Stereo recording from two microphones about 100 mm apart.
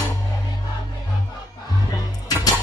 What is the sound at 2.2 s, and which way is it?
Music, 40° left (ahead or behind).